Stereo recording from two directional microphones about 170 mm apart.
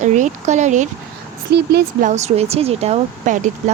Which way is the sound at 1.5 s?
70° right (ahead or behind).